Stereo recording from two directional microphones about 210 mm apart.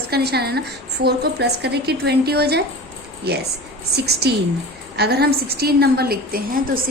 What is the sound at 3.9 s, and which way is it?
A woman's voice, 50° right (ahead or behind).